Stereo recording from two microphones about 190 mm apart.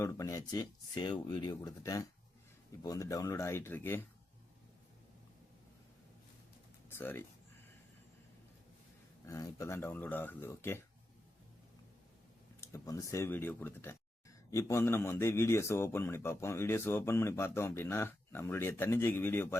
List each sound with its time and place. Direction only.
0.0 s speech: 15° left (ahead or behind)
6.9 s speech: 10° left (ahead or behind)
9.2 s speech: 15° left (ahead or behind)
12.5 s speech: 15° left (ahead or behind)